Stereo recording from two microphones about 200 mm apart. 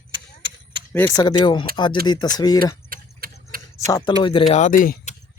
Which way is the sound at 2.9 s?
45° right (ahead or behind).